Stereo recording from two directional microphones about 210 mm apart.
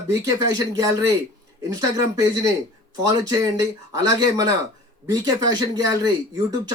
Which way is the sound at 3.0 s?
15° right (ahead or behind).